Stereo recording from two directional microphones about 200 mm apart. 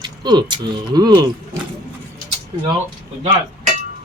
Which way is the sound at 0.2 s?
20° right (ahead or behind).